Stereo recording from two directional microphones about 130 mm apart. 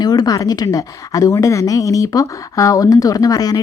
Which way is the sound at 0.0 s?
30° left (ahead or behind).